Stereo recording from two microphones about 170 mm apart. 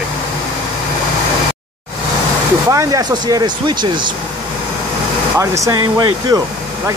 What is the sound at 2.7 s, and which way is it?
Speech, 20° right (ahead or behind).